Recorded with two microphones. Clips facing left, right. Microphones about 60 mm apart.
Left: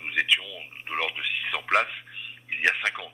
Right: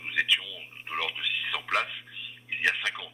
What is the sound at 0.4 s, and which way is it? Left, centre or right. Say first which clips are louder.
A man's voice: left 3 dB; left.